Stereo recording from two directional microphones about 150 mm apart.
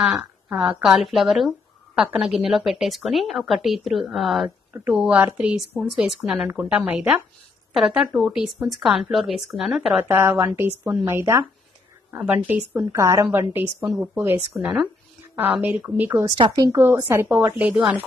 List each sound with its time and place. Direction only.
0.0 s a woman's voice: 10° right (ahead or behind)
10.0 s a woman's voice: 15° right (ahead or behind)
16.3 s a woman's voice: 30° right (ahead or behind); by 17.9 s 10° right (ahead or behind)